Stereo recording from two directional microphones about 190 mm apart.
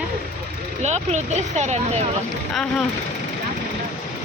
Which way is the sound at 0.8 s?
35° right (ahead or behind).